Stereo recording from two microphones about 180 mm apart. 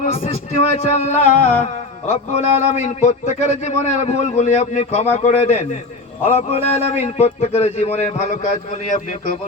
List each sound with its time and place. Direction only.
0.0 s a man's voice: 35° left (ahead or behind)